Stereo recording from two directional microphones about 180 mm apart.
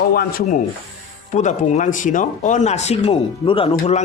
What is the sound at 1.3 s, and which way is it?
A man's voice, 40° left (ahead or behind).